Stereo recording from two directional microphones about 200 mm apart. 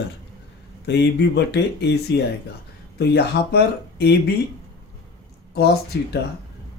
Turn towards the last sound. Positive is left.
turn(degrees=55)  # may be behind; listen again after turning